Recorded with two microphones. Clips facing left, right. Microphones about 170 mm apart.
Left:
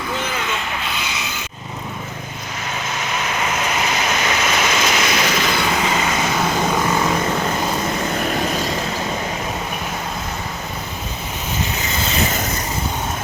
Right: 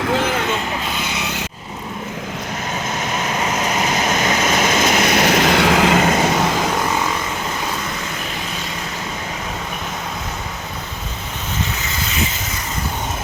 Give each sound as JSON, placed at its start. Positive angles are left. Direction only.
{"t": 0.9, "sound": "vehicle", "side_deg": -55}
{"t": 3.2, "sound": "vehicle", "side_deg": -35}